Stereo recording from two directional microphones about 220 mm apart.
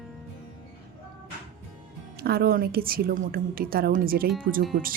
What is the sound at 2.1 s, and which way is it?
A woman's voice, 45° right (ahead or behind).